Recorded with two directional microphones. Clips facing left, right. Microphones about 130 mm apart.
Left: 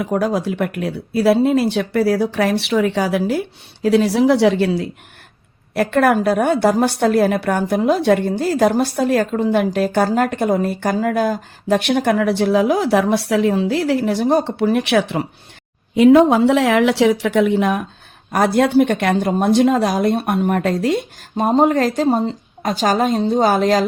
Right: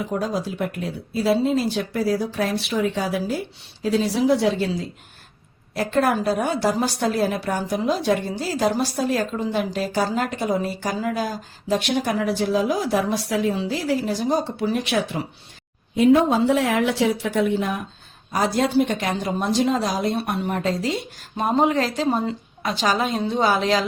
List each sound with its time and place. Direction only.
0.0 s a woman's voice: 70° left (ahead or behind)
16.0 s a woman's voice: 80° left
18.3 s a woman's voice: 60° left (ahead or behind)